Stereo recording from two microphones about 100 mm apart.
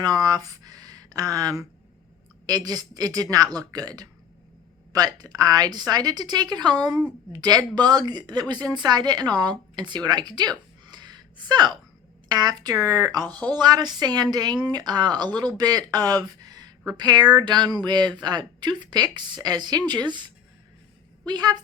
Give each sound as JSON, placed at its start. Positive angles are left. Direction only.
{"t": 0.0, "sound": "a woman's voice", "side_deg": -40}